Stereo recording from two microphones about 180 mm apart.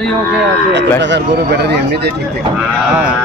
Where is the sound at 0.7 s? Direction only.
80° right.